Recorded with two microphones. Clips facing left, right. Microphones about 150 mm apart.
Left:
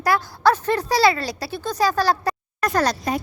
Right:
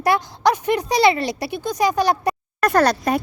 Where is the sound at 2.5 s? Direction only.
60° right (ahead or behind).